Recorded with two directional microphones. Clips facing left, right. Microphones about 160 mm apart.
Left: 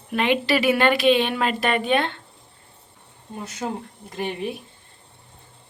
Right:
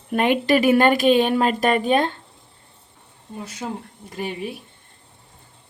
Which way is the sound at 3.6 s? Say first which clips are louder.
Left 2 dB; 5° left (ahead or behind).